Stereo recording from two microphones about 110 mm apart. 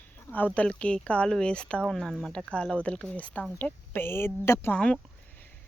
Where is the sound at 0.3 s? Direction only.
15° left (ahead or behind).